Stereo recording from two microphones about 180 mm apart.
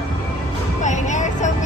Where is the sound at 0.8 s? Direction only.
40° left (ahead or behind).